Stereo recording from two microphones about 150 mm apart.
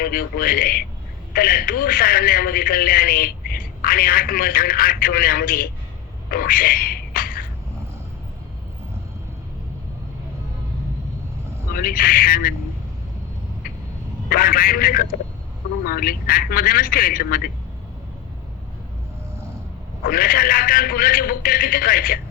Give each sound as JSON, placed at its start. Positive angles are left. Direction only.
{"t": 0.0, "sound": "a man's voice", "side_deg": 80}
{"t": 6.3, "sound": "a sound", "side_deg": 75}
{"t": 11.7, "sound": "a man's voice", "side_deg": 80}
{"t": 14.3, "sound": "a man's voice", "side_deg": 75}
{"t": 20.1, "sound": "a man's voice", "side_deg": 75}